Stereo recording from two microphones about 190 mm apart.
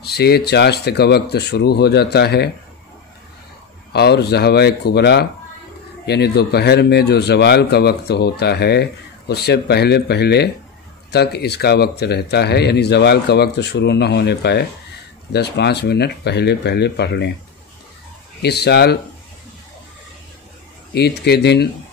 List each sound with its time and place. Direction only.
0.0 s speech: 55° left (ahead or behind)
3.9 s speech: 60° left (ahead or behind)
18.4 s speech: 60° left (ahead or behind)
20.9 s speech: 60° left (ahead or behind)